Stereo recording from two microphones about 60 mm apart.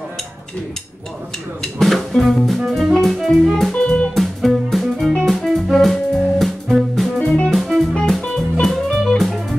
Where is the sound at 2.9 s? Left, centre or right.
Centre.